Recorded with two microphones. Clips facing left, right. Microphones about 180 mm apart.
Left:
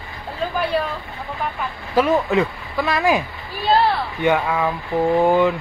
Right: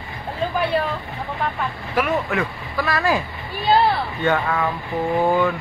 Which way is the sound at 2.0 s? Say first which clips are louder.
Left 5 dB; 20° left (ahead or behind).